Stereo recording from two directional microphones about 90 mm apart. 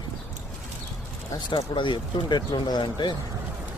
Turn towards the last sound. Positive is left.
turn(degrees=60)  # may be behind; listen again after turning